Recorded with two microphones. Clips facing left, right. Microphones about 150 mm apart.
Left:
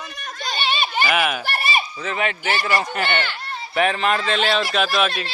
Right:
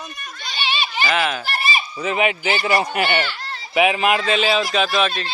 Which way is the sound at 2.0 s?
15° right (ahead or behind).